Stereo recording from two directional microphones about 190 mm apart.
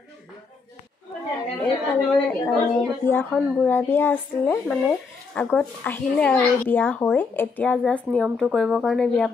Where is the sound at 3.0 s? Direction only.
10° left (ahead or behind).